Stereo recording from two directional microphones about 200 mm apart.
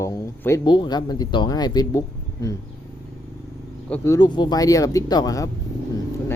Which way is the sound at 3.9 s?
15° left (ahead or behind).